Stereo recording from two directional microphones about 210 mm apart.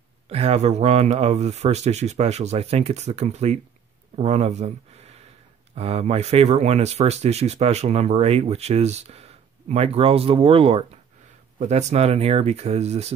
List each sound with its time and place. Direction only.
0.3 s speech: 30° right (ahead or behind)
5.8 s speech: 30° right (ahead or behind)